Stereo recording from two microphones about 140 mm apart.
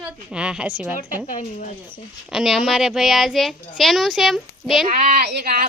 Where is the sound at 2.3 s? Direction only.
Centre (ahead or behind).